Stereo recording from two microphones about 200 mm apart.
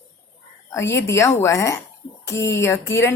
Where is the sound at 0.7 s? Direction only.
15° left (ahead or behind).